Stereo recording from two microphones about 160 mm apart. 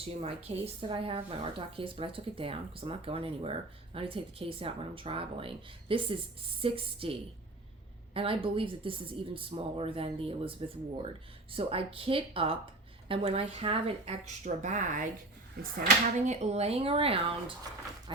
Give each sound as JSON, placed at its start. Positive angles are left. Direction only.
{"t": 0.0, "sound": "speech", "side_deg": -40}